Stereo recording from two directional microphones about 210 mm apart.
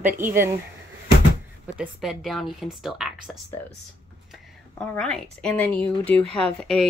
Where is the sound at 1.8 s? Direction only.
Centre (ahead or behind).